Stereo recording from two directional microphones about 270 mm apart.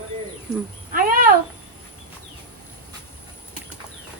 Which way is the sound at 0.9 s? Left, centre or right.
Right.